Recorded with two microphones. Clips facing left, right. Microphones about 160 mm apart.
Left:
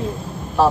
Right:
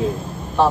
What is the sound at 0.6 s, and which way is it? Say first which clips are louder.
Speech: left 1 dB; centre (ahead or behind).